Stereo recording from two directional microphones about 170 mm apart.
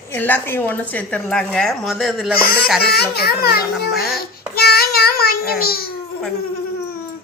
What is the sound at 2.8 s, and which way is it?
Speech, 70° left (ahead or behind).